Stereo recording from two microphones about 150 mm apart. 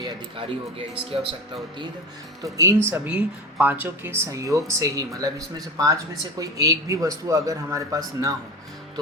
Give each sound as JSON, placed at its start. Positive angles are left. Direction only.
{"t": 0.0, "sound": "speech", "side_deg": -30}
{"t": 2.4, "sound": "speech", "side_deg": -20}